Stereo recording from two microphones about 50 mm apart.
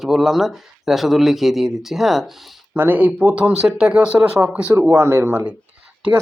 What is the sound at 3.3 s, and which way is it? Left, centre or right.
Speech, centre.